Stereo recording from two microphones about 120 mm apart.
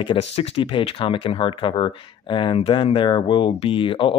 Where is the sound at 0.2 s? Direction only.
50° left (ahead or behind).